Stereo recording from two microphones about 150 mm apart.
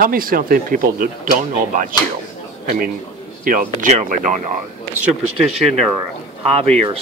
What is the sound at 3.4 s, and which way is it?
Speech, 65° right (ahead or behind).